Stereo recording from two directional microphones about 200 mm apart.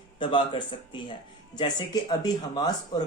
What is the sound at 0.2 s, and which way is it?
Speech, 25° left (ahead or behind).